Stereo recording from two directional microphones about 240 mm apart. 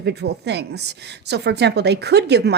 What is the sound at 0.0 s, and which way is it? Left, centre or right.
Speech, right.